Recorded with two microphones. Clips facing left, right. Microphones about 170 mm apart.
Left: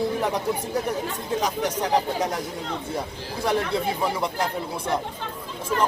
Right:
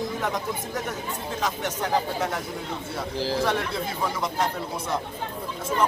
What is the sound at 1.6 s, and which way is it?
Speech, 35° left (ahead or behind).